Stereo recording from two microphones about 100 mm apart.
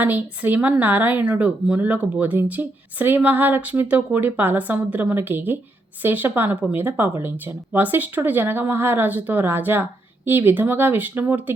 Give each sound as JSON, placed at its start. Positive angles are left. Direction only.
{"t": 0.0, "sound": "speech", "side_deg": -15}